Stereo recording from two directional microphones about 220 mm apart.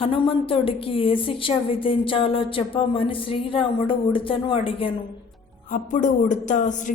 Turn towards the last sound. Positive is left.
turn(degrees=35)  # may be behind; listen again after turning